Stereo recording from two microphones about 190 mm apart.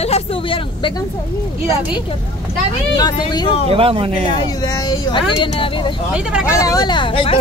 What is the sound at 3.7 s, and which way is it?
Speech, 30° right (ahead or behind).